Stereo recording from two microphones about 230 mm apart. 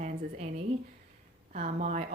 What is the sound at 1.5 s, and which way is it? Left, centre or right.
Speech, right.